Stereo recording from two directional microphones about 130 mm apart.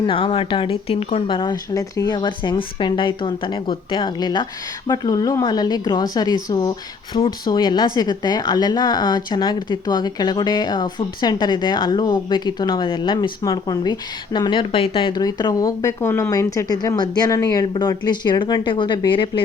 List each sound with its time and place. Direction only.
0.1 s speech: 45° left (ahead or behind)
1.4 s speech: 30° left (ahead or behind)